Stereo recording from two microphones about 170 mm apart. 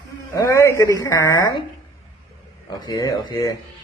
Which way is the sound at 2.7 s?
20° left (ahead or behind).